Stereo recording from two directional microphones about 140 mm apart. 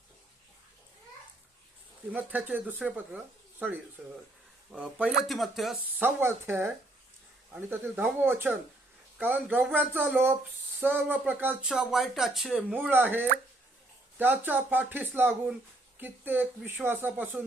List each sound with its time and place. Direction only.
2.1 s speech: 10° right (ahead or behind)
6.0 s speech: 15° right (ahead or behind)
11.6 s speech: 5° right (ahead or behind)
12.7 s speech: 10° right (ahead or behind)